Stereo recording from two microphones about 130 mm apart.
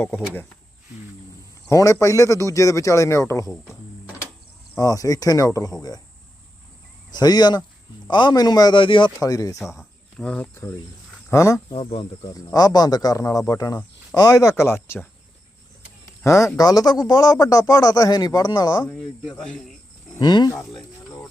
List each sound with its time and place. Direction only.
1.7 s a man's voice: 25° left (ahead or behind)
4.7 s a man's voice: 25° left (ahead or behind)
7.1 s speech: 30° left (ahead or behind)
9.7 s cricket: 5° left (ahead or behind)
10.5 s a man's voice: 25° left (ahead or behind)
11.7 s speech: 45° left (ahead or behind)
12.2 s a man's voice: 30° left (ahead or behind)
16.2 s a man's voice: 20° left (ahead or behind)
18.9 s speech: centre (ahead or behind)
20.1 s a man's voice: 35° left (ahead or behind)